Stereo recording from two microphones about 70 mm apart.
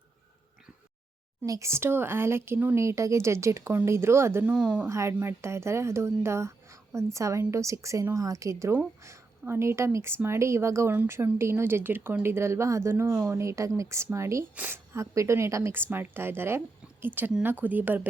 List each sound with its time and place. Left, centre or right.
1.5 s speech: right
4.4 s speech: centre
4.9 s speech: right
14.5 s speech: right
14.9 s speech: right